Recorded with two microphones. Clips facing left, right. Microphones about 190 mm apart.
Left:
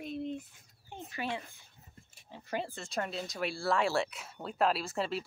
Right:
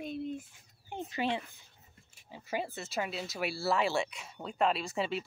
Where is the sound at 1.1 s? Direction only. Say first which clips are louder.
Right 4 dB; 25° right (ahead or behind).